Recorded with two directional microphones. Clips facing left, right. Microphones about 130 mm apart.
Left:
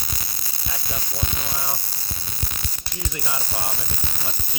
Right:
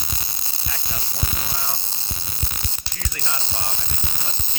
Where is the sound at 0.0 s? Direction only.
25° right (ahead or behind).